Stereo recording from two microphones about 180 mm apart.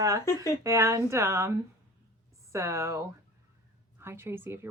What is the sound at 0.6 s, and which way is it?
A woman's voice, 15° right (ahead or behind).